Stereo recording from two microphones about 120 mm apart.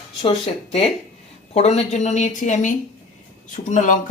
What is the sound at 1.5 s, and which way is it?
Speech, 60° left (ahead or behind).